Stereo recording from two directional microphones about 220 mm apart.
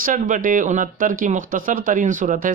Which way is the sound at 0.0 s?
35° right (ahead or behind).